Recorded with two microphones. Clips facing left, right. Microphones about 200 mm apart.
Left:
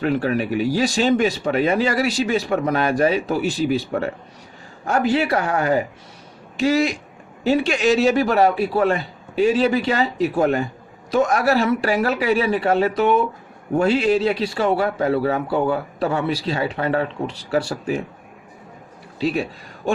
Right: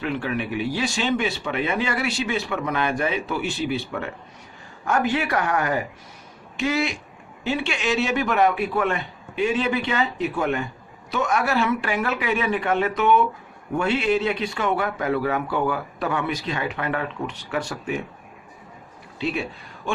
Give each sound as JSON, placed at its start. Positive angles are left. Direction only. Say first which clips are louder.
{"t": 0.0, "sound": "a man's voice", "louder": "left 6 dB", "side_deg": 40}
{"t": 19.2, "sound": "speech", "louder": "left 5 dB", "side_deg": 40}